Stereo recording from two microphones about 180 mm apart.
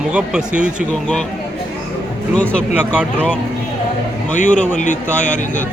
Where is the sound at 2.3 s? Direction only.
5° left (ahead or behind).